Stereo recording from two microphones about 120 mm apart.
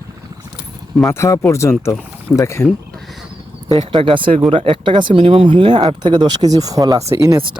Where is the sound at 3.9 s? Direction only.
45° right (ahead or behind); by 7.4 s 25° right (ahead or behind).